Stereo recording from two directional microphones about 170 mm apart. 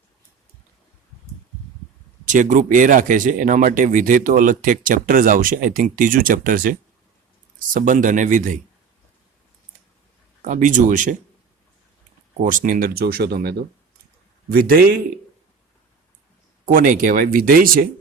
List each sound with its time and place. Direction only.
2.2 s speech: 45° right (ahead or behind)
10.4 s speech: 50° right (ahead or behind)
12.4 s speech: 50° right (ahead or behind)
16.6 s speech: 50° right (ahead or behind)